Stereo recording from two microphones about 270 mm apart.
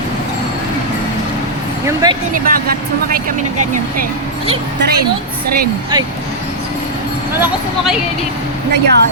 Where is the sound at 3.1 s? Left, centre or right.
Right.